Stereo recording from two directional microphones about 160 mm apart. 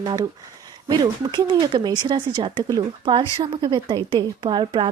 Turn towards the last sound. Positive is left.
turn(degrees=-30)  # may be behind; listen again after turning